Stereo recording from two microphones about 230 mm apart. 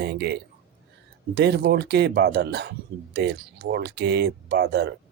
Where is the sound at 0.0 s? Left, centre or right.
Right.